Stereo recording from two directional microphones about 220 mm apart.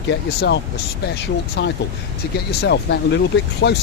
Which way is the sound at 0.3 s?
50° left (ahead or behind).